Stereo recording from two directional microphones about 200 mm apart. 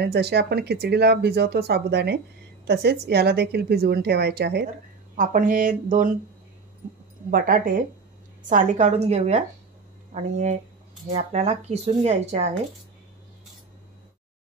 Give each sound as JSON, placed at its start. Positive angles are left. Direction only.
{"t": 0.0, "sound": "speech", "side_deg": -55}
{"t": 5.1, "sound": "speech", "side_deg": -40}
{"t": 7.2, "sound": "speech", "side_deg": -45}